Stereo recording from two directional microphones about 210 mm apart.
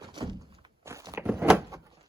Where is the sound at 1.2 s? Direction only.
5° right (ahead or behind).